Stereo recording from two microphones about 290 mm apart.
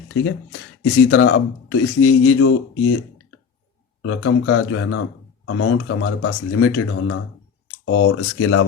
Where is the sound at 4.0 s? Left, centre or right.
Left.